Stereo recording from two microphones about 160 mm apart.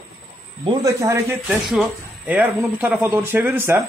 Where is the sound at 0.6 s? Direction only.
25° right (ahead or behind).